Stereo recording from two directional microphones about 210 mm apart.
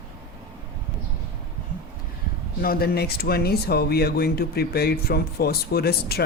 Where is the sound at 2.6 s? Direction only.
45° left (ahead or behind).